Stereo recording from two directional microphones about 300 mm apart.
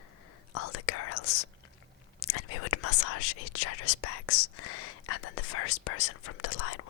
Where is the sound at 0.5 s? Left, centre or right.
Left.